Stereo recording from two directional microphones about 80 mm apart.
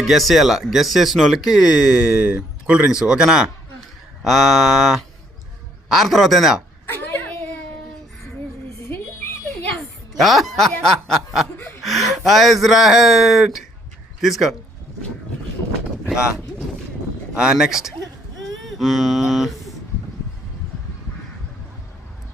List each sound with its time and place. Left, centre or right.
0.0 s speech: centre
6.8 s whimper: left
9.7 s a sound: centre
10.7 s snicker: centre
11.8 s speech: centre
16.0 s a sound: centre
17.3 s speech: centre